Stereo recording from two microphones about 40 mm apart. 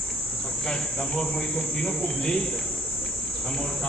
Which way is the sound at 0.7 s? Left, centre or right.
Centre.